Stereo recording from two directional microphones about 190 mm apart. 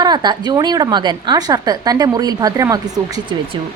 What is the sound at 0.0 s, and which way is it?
A woman's voice, 20° right (ahead or behind).